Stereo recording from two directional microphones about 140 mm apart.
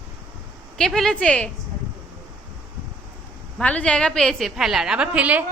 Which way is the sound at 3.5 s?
10° left (ahead or behind).